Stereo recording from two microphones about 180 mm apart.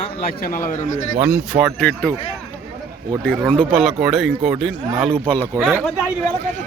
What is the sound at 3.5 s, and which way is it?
Speech, centre (ahead or behind).